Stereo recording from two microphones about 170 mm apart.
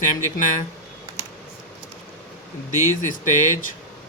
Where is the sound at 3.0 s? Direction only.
50° left (ahead or behind).